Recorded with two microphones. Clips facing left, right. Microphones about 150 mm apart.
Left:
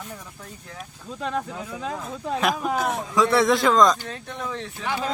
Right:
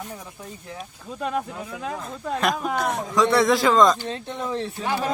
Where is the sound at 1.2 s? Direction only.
10° right (ahead or behind).